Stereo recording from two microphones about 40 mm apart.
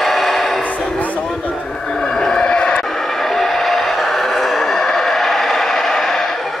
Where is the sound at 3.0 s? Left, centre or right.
Centre.